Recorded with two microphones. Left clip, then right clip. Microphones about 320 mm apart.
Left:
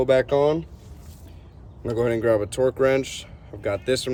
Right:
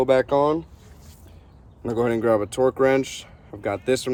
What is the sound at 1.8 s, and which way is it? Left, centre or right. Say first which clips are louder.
Speech: even; centre.